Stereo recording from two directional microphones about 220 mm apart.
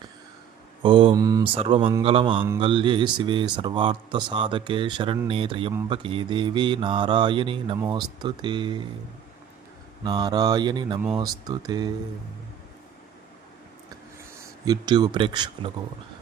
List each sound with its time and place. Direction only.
0.8 s speech: 20° right (ahead or behind)
10.0 s speech: 20° right (ahead or behind)
14.6 s speech: 20° right (ahead or behind)